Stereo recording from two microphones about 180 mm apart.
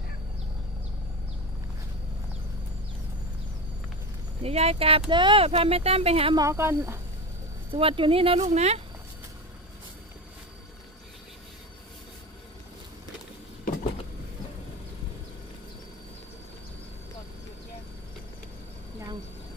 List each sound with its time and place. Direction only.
4.4 s speech: 35° right (ahead or behind)
6.3 s speech: 15° right (ahead or behind)
7.7 s speech: 30° right (ahead or behind)